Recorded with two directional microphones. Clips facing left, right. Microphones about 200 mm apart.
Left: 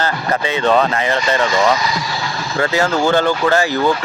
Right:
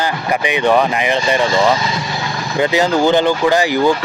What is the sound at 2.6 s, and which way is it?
Speech, 15° right (ahead or behind).